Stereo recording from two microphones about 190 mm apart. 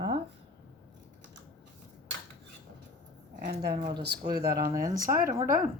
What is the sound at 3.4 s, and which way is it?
Speech, 50° right (ahead or behind).